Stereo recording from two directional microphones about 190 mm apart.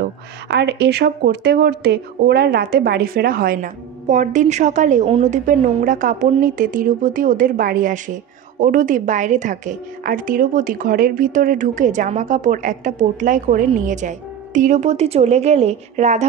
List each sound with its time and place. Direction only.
0.0 s a woman's voice: 65° right (ahead or behind); by 16.3 s 35° right (ahead or behind)